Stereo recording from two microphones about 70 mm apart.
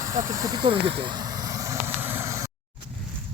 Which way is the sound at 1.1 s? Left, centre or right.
Right.